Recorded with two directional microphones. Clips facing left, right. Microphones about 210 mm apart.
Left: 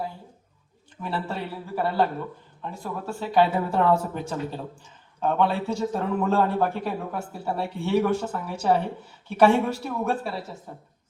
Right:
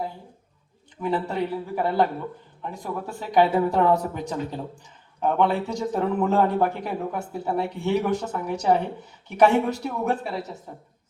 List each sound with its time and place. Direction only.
1.0 s speech: 15° right (ahead or behind)